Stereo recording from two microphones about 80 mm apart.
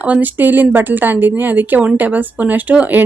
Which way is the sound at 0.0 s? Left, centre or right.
Right.